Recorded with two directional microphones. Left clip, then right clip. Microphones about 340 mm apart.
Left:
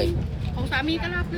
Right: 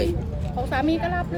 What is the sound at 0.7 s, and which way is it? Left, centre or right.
Speech, right.